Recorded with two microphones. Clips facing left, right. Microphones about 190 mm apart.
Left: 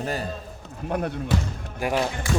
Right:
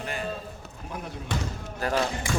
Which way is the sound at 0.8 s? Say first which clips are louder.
Left 11 dB; 70° left (ahead or behind).